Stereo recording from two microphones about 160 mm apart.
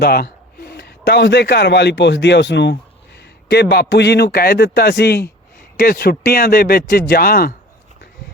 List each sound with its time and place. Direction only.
0.0 s a man's voice: 90° left
5.7 s a man's voice: 70° left (ahead or behind)